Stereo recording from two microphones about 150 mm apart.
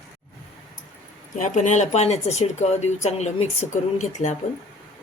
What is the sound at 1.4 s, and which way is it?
Speech, 55° left (ahead or behind).